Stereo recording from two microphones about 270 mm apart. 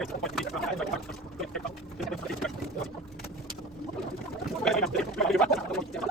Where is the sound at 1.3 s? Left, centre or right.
Centre.